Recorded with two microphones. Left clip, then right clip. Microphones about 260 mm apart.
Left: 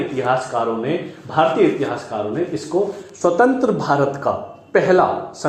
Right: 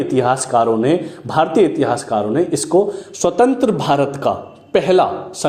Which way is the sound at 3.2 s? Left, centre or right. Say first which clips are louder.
Right 1 dB; right.